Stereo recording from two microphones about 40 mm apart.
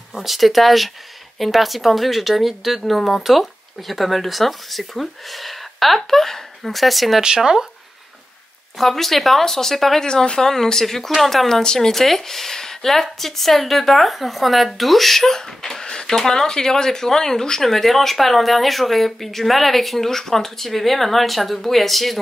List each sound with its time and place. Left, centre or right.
0.1 s speech: centre
7.2 s speech: centre
8.7 s speech: centre
10.0 s speech: centre